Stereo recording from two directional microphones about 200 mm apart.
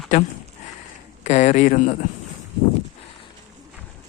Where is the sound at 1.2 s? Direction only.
35° left (ahead or behind).